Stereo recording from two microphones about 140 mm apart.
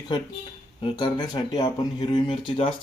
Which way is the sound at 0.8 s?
35° left (ahead or behind).